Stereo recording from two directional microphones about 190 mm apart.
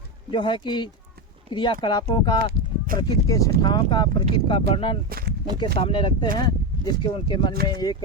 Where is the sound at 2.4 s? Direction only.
50° right (ahead or behind).